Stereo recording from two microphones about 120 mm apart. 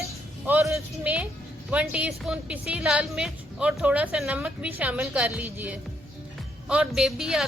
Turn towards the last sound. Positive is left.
turn(degrees=-5)  # may be behind; listen again after turning